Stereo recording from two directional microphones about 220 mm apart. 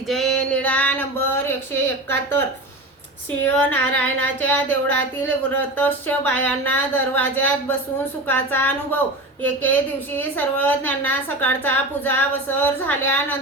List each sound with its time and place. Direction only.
0.1 s male singing: centre (ahead or behind)
3.4 s a woman's voice: 5° left (ahead or behind)